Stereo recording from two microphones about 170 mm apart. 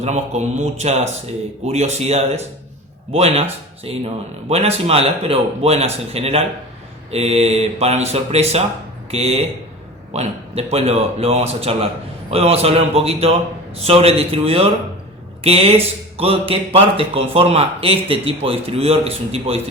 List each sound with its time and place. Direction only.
0.0 s speech: 40° right (ahead or behind)